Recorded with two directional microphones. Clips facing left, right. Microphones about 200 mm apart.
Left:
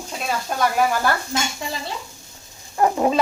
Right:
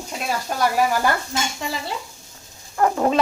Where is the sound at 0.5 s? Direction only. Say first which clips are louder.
Even; 5° right (ahead or behind).